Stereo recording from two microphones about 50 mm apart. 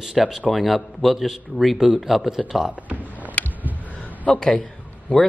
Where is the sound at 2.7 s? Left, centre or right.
Right.